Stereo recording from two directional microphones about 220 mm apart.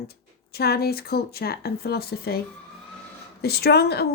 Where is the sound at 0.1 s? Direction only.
45° left (ahead or behind).